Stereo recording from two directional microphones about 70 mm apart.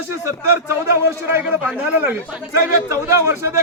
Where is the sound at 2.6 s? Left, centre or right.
Right.